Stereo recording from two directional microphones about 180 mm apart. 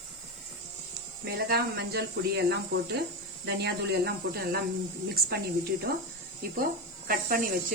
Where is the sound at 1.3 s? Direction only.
60° right (ahead or behind).